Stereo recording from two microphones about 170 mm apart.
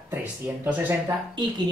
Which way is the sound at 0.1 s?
10° right (ahead or behind).